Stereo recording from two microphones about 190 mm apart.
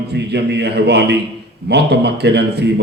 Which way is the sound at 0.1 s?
60° right (ahead or behind).